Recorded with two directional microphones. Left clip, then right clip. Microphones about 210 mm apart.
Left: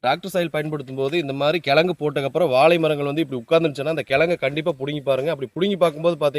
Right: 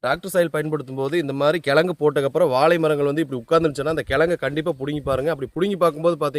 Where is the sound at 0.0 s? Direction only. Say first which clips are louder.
Right 1 dB; 20° right (ahead or behind).